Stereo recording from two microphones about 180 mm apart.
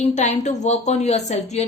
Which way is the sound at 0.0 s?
40° left (ahead or behind).